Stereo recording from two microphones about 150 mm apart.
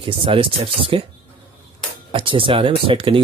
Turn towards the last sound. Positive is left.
turn(degrees=-35)  # may be behind; listen again after turning